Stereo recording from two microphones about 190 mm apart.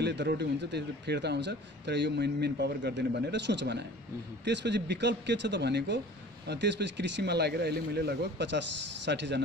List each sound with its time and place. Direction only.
0.0 s a man's voice: 65° right (ahead or behind)